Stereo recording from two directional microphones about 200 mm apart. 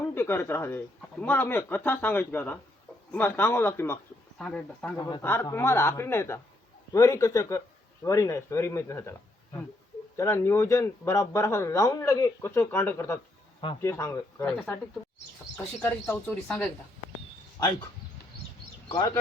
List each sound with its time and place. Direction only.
0.1 s speech: 10° left (ahead or behind)
4.9 s speech: 20° left (ahead or behind)
15.5 s speech: 10° left (ahead or behind)
18.9 s speech: 20° left (ahead or behind)